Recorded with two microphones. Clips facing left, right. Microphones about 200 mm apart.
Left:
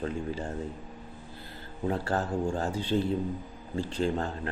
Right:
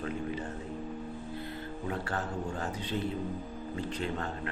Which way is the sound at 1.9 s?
35° left (ahead or behind).